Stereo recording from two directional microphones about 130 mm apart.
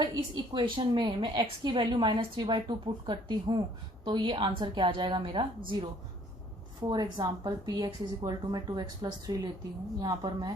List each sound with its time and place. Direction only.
0.0 s a woman's voice: 30° right (ahead or behind)
6.8 s a woman's voice: 30° right (ahead or behind)